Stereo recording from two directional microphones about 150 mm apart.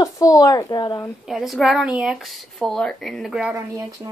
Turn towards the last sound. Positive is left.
turn(degrees=-5)  # may be behind; listen again after turning